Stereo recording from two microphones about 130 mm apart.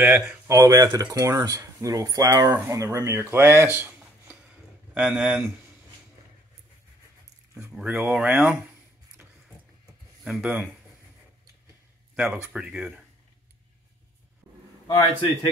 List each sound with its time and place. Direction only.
0.0 s speech: 10° right (ahead or behind)
0.5 s speech: 30° right (ahead or behind)
4.5 s a sound: 10° right (ahead or behind)
7.6 s speech: 5° right (ahead or behind)
10.2 s speech: 5° right (ahead or behind)
12.2 s speech: 10° right (ahead or behind)